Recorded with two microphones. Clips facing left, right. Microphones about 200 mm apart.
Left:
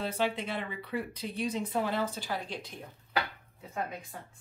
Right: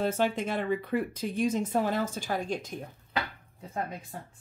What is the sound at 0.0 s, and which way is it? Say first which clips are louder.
Speech: right 4 dB; 45° right (ahead or behind).